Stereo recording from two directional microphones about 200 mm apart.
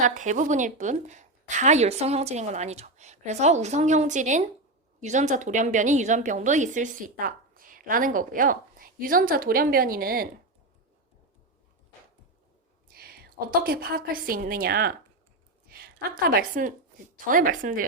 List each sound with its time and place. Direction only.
0.0 s a woman's voice: 40° right (ahead or behind)
12.9 s a woman's voice: 50° right (ahead or behind)